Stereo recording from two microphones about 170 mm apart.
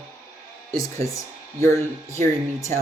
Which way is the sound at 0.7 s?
20° left (ahead or behind).